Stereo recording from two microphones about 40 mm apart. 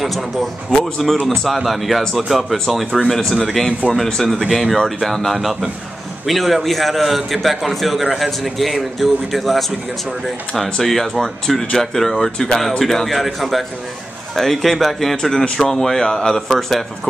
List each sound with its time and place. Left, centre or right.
0.0 s a man's voice: centre
0.7 s speech: centre
1.3 s a man's voice: centre
3.2 s speech: centre
3.4 s a man's voice: centre
15.4 s speech: centre